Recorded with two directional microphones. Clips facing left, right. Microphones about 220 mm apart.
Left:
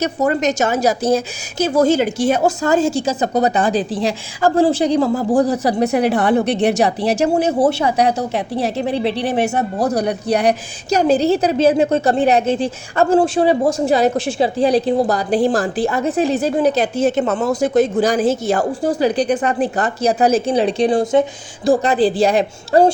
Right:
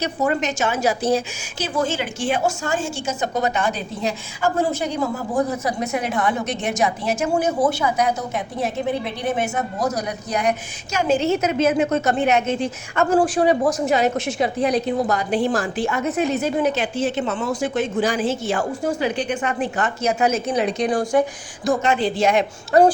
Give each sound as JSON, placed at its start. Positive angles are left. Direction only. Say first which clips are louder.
{"t": 0.0, "sound": "a woman's voice", "louder": "left 5 dB", "side_deg": 40}
{"t": 2.8, "sound": "a woman's voice", "louder": "left 9 dB", "side_deg": 90}
{"t": 3.2, "sound": "a woman's voice", "louder": "left 6 dB", "side_deg": 35}
{"t": 3.7, "sound": "a woman's voice", "louder": "left 7 dB", "side_deg": 90}
{"t": 5.3, "sound": "a woman's voice", "louder": "left 6 dB", "side_deg": 75}
{"t": 5.6, "sound": "a woman's voice", "louder": "left 8 dB", "side_deg": 35}
{"t": 6.4, "sound": "a woman's voice", "louder": "left 8 dB", "side_deg": 65}
{"t": 8.0, "sound": "a woman's voice", "louder": "left 5 dB", "side_deg": 30}
{"t": 9.7, "sound": "a woman's voice", "louder": "left 6 dB", "side_deg": 30}